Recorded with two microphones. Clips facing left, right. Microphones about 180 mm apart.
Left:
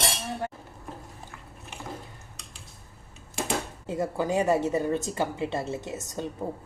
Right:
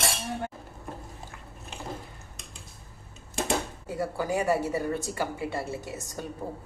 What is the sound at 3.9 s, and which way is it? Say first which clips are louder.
A woman's voice: left 2 dB; 20° left (ahead or behind).